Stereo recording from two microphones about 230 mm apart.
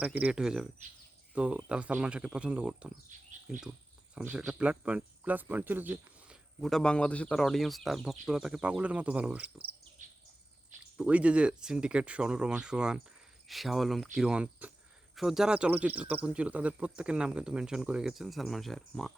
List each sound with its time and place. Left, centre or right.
0.0 s speech: centre
3.1 s a sound: right
3.5 s speech: centre
10.9 s speech: centre